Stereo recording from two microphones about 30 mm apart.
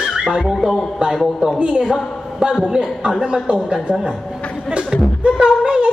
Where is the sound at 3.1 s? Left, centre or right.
Right.